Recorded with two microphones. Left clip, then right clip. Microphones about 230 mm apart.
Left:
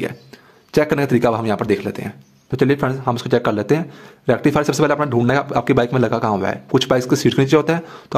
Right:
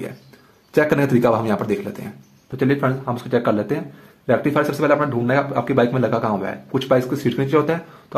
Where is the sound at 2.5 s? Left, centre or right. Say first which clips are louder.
Left 2 dB; left.